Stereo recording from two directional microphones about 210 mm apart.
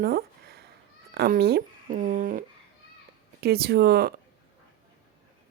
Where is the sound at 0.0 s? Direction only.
45° right (ahead or behind).